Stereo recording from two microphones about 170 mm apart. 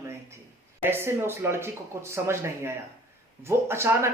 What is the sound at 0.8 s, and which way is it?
Speech, 15° right (ahead or behind).